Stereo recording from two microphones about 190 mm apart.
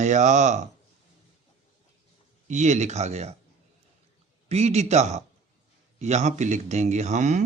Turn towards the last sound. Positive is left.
turn(degrees=-40)  # may be behind; listen again after turning